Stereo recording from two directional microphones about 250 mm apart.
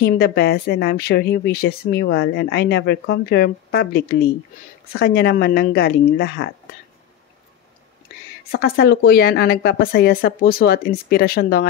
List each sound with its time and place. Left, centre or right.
0.0 s speech: left
8.5 s speech: left